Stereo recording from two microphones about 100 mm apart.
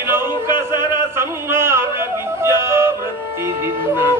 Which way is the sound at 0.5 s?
25° right (ahead or behind).